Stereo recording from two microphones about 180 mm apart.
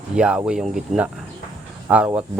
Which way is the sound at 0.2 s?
5° right (ahead or behind).